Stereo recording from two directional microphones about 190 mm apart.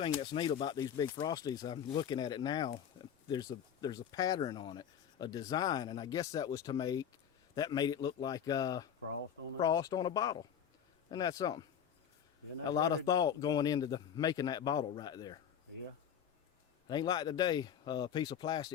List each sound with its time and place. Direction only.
0.2 s speech: 25° left (ahead or behind)
12.6 s speech: 20° left (ahead or behind)
16.9 s speech: 20° left (ahead or behind)